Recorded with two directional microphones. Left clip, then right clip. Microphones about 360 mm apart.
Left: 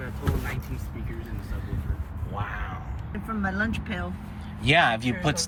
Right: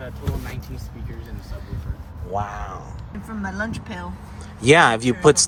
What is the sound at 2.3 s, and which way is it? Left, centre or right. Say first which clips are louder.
Speech: right 7 dB; centre.